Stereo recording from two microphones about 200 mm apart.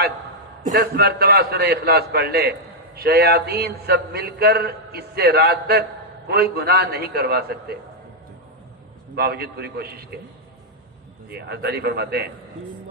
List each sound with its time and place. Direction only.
0.6 s a man's voice: 45° right (ahead or behind)
9.1 s a man's voice: 50° right (ahead or behind)
11.3 s a man's voice: 55° right (ahead or behind)